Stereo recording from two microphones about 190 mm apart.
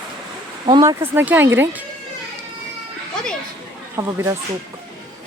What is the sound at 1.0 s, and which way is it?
Speech, 10° right (ahead or behind).